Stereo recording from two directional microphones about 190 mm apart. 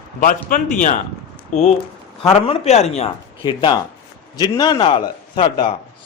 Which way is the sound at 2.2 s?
35° left (ahead or behind).